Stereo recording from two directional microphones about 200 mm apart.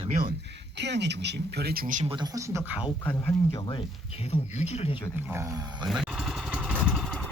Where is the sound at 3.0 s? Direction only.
10° left (ahead or behind).